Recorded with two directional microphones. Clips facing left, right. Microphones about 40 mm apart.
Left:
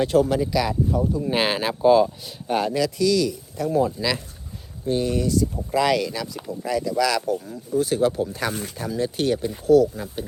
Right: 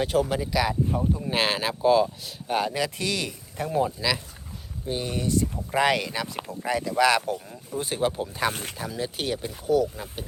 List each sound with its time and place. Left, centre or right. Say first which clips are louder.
0.0 s speech: left 5 dB; centre
0.9 s speech: left 3 dB; right
1.2 s speech: left 3 dB; centre
3.0 s speech: left 9 dB; right
4.0 s speech: left 2 dB; centre
5.3 s speech: left 3 dB; right
7.3 s speech: left 9 dB; centre
8.8 s speech: left 7 dB; centre